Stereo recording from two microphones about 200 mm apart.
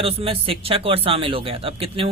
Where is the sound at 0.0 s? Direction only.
25° right (ahead or behind).